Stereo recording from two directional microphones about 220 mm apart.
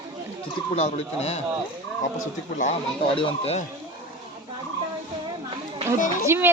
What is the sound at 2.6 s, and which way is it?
Speech, 25° left (ahead or behind).